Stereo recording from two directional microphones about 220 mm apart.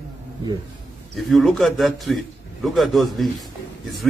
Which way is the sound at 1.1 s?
Centre (ahead or behind).